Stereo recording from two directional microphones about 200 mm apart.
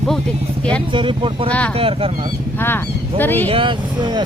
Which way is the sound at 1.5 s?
5° left (ahead or behind).